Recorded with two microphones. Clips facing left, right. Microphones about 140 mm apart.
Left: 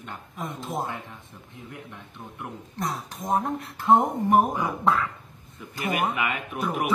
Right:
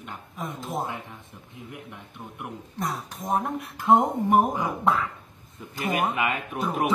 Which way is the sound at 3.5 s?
15° right (ahead or behind).